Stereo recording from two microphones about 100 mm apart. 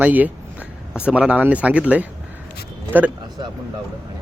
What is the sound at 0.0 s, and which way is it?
Speech, 15° right (ahead or behind).